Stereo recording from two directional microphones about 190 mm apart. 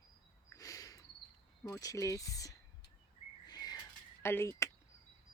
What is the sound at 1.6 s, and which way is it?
Speech, 15° left (ahead or behind).